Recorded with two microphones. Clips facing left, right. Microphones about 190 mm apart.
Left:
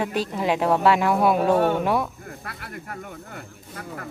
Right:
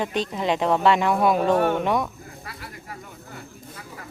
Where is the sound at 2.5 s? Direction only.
55° left (ahead or behind).